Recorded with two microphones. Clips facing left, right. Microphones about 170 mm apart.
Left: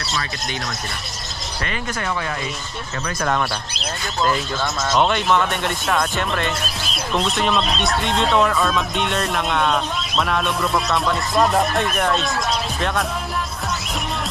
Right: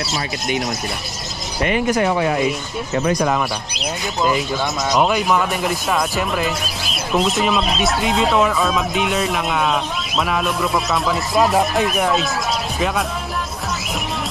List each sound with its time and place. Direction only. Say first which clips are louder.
1.6 s speech: right 10 dB; 15° right (ahead or behind)
4.9 s speech: right 1 dB; 5° right (ahead or behind)